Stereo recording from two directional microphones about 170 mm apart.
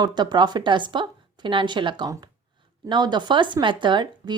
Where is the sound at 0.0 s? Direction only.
25° right (ahead or behind).